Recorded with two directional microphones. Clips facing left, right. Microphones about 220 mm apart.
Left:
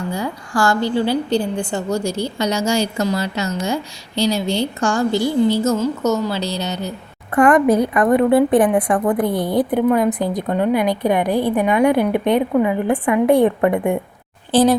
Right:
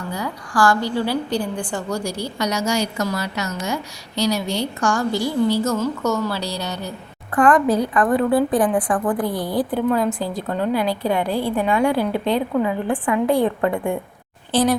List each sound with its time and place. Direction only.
0.1 s a woman's voice: 25° left (ahead or behind)